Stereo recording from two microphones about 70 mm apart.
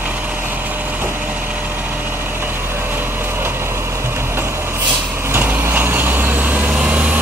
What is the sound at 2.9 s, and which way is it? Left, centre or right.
Vehicle, right.